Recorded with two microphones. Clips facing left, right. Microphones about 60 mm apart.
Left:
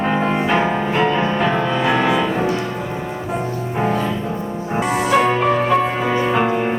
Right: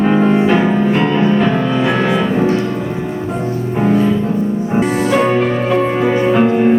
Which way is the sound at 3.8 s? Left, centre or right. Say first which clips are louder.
Right 6 dB; centre.